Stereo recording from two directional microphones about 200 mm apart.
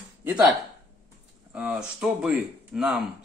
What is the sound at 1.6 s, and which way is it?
Speech, 5° right (ahead or behind).